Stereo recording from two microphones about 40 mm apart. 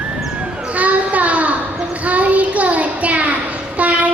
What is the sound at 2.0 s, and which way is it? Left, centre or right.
Child singing, right.